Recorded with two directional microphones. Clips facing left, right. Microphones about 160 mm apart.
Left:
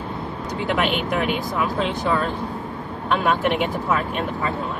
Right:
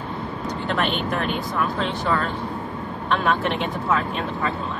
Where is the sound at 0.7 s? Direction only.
10° left (ahead or behind).